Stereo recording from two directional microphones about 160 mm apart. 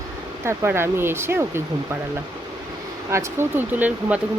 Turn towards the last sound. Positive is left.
turn(degrees=-10)  # may be behind; listen again after turning